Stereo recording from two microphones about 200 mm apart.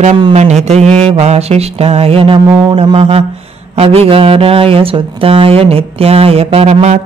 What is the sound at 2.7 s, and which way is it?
Speech, 30° right (ahead or behind).